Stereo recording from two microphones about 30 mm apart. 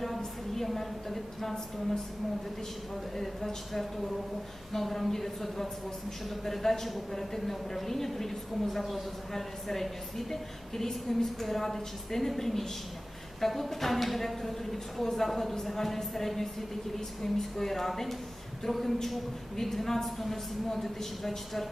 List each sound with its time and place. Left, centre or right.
0.5 s a woman's voice: centre
3.2 s a woman's voice: centre
10.8 s a woman's voice: left
11.4 s a woman's voice: centre